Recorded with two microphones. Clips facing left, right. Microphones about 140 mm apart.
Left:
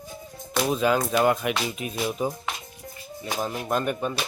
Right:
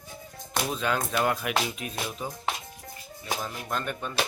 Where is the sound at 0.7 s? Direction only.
5° left (ahead or behind).